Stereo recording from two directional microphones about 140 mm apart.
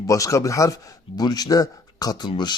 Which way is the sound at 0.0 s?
25° left (ahead or behind).